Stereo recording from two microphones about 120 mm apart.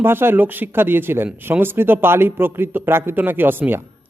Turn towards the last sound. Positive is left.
turn(degrees=-15)  # may be behind; listen again after turning